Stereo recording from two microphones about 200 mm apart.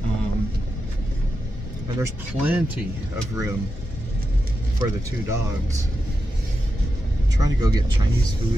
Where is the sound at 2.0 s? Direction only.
10° right (ahead or behind).